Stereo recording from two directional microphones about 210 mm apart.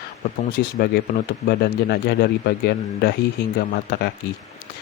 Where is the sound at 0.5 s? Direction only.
45° left (ahead or behind).